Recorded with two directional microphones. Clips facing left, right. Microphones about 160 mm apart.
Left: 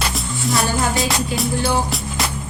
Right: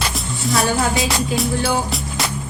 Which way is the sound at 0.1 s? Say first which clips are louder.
Even; centre (ahead or behind).